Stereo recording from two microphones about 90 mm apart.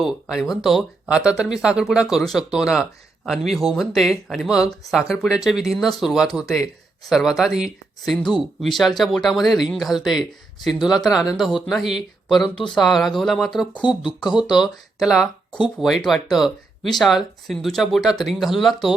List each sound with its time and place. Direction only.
0.0 s speech: centre (ahead or behind)